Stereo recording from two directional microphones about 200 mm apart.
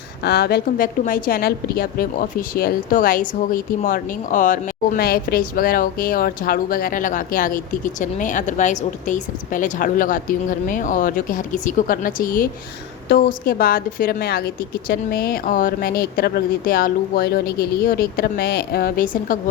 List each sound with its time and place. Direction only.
0.2 s a woman's voice: 55° left (ahead or behind)